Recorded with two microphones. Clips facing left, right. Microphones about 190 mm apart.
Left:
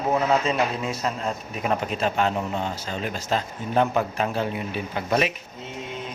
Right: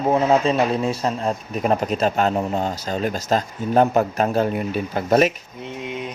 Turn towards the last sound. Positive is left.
turn(degrees=-45)  # may be behind; listen again after turning